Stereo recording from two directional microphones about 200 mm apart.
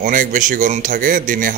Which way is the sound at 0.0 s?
40° right (ahead or behind).